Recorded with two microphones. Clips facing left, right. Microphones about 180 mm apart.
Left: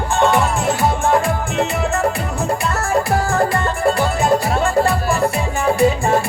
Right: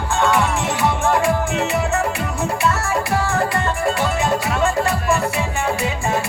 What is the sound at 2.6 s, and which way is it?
Music, 35° left (ahead or behind).